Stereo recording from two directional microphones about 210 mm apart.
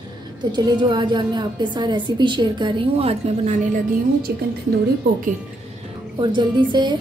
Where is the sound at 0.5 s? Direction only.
20° right (ahead or behind).